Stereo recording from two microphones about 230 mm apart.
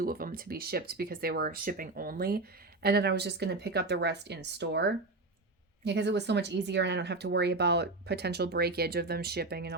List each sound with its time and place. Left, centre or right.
0.0 s speech: right